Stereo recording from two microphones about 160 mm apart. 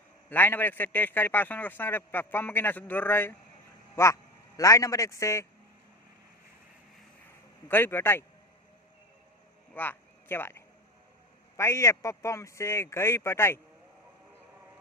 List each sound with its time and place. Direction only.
0.3 s a man's voice: 10° left (ahead or behind)
7.7 s a man's voice: 15° left (ahead or behind)
9.7 s a man's voice: 10° left (ahead or behind)